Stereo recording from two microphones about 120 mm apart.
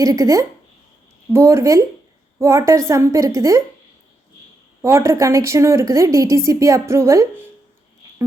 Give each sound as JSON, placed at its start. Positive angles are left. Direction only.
{"t": 0.0, "sound": "a woman's voice", "side_deg": -25}
{"t": 4.8, "sound": "a woman's voice", "side_deg": -25}